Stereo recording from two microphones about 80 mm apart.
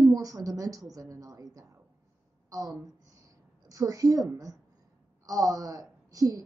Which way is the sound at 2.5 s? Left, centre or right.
Right.